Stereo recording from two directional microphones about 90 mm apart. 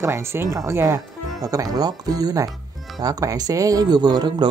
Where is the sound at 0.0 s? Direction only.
30° right (ahead or behind).